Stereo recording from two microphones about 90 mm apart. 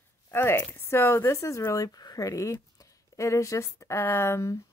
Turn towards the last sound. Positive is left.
turn(degrees=35)  # may be behind; listen again after turning